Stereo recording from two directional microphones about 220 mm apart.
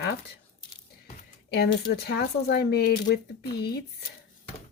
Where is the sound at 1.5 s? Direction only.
50° left (ahead or behind).